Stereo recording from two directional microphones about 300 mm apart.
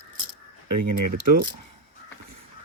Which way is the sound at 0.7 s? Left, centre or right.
Right.